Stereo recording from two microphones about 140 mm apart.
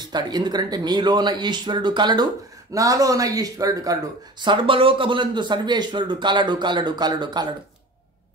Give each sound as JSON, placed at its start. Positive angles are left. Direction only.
{"t": 0.0, "sound": "speech", "side_deg": -30}